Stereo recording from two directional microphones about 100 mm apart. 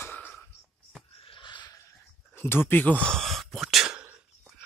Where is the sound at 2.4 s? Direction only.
20° left (ahead or behind).